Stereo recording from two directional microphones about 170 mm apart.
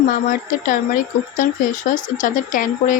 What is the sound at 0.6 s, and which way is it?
Speech, 50° left (ahead or behind).